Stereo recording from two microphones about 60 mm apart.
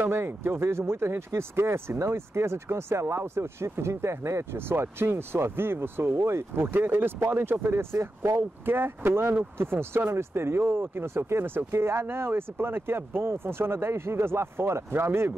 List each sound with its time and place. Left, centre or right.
0.1 s speech: right